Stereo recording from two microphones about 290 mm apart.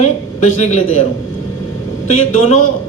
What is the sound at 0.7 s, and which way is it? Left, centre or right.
Speech, left.